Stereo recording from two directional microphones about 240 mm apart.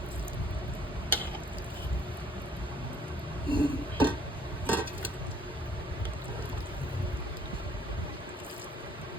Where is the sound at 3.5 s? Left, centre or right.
Right.